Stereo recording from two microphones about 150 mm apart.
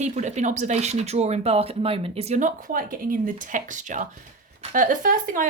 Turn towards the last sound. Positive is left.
turn(degrees=-65)  # may be behind; listen again after turning